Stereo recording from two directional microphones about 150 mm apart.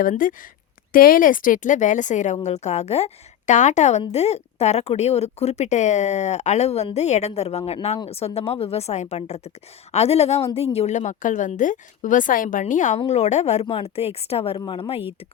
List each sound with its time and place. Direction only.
0.0 s a woman's voice: 65° left (ahead or behind); by 15.0 s 40° left (ahead or behind)